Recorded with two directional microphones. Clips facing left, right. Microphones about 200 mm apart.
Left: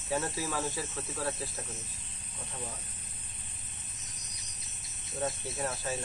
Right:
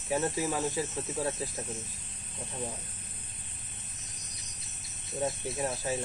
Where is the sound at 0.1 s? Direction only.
20° right (ahead or behind).